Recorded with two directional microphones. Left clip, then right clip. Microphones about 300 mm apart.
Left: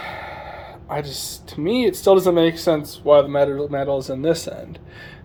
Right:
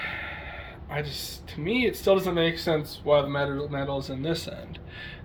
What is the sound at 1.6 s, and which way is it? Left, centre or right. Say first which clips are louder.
Speech: left 7 dB; centre.